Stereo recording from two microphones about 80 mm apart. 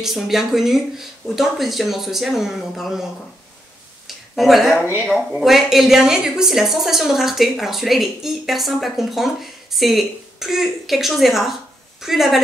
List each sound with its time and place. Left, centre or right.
0.0 s a woman's voice: centre
4.1 s a woman's voice: centre